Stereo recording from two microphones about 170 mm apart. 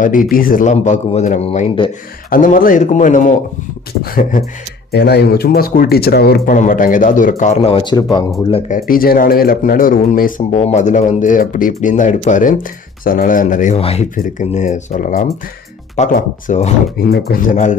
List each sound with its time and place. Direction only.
0.0 s speech: 55° left (ahead or behind)
2.2 s speech: 55° left (ahead or behind)
4.9 s speech: 75° left (ahead or behind); by 8.3 s 25° left (ahead or behind)
8.6 s speech: 55° left (ahead or behind)
13.7 s speech: 35° left (ahead or behind)
14.1 s speech: 50° left (ahead or behind)
17.1 s speech: 60° left (ahead or behind)